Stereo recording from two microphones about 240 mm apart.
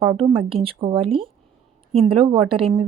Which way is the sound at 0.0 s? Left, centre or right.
Right.